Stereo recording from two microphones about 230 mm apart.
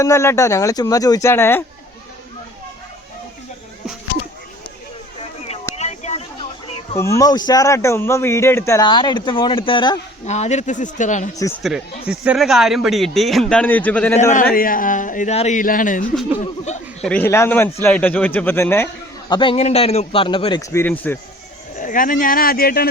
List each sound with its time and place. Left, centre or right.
0.0 s speech: centre
5.7 s a sound: left
6.9 s speech: centre; by 11.3 s left
11.6 s a man's voice: centre
14.5 s speech: left
17.0 s speech: centre
19.3 s a man's voice: left
21.8 s speech: left